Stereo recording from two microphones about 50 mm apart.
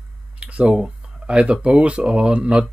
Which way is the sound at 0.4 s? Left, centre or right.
Right.